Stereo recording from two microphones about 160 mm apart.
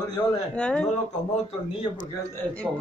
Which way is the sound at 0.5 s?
5° left (ahead or behind).